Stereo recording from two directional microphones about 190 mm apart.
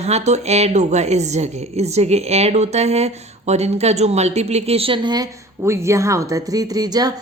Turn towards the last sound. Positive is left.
turn(degrees=-20)  # may be behind; listen again after turning